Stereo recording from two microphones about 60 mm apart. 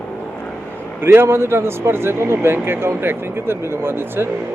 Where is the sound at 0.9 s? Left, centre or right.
Right.